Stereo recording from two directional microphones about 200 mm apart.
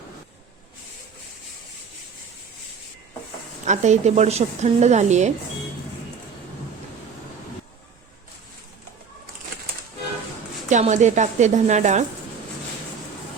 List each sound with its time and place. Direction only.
3.7 s a woman's voice: 35° right (ahead or behind)
10.7 s a woman's voice: 35° right (ahead or behind)